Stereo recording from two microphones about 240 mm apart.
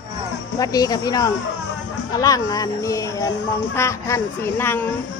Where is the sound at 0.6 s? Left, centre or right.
Centre.